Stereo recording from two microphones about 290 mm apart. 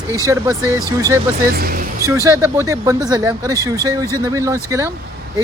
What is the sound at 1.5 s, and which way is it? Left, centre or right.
Speech, right.